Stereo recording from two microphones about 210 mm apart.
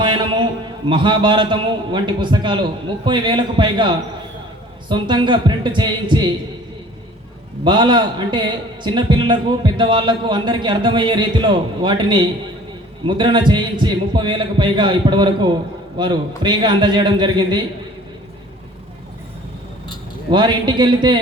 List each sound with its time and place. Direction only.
0.0 s a sound: 20° right (ahead or behind)
0.9 s a man's voice: 20° right (ahead or behind)
7.6 s a man's voice: 20° right (ahead or behind)
20.3 s a man's voice: 20° right (ahead or behind)